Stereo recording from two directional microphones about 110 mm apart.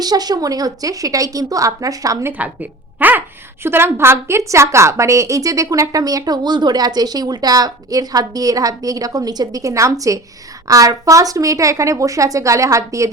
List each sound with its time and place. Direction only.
0.0 s a woman's voice: 35° right (ahead or behind)
2.4 s a woman's voice: 15° right (ahead or behind)